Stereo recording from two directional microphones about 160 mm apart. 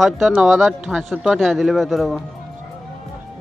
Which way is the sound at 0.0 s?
Centre (ahead or behind).